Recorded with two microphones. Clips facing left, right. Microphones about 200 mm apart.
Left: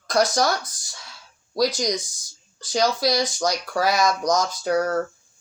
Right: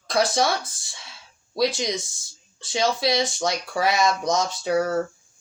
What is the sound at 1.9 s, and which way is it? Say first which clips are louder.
Speech: left 2 dB; 25° right (ahead or behind).